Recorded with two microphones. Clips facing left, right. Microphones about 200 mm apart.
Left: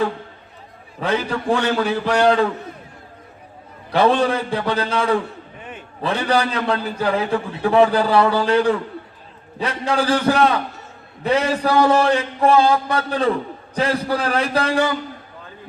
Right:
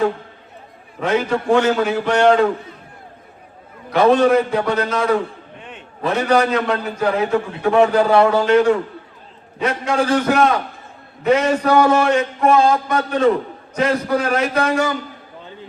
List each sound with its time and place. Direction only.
1.0 s a man's voice: 35° left (ahead or behind)
3.8 s a man's voice: 30° left (ahead or behind)
5.5 s a sound: 5° left (ahead or behind)
6.0 s a man's voice: 30° left (ahead or behind)